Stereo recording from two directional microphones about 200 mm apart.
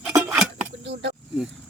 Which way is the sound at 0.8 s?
60° right (ahead or behind).